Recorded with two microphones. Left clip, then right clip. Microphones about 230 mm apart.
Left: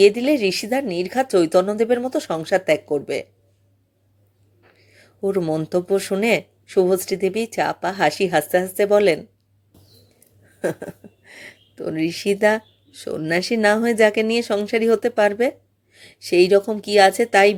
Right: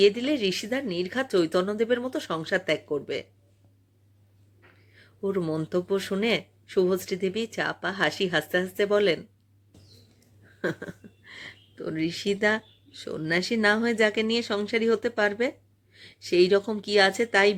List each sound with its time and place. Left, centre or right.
0.0 s speech: centre
4.8 s speech: centre
10.6 s a sound: centre
11.3 s speech: centre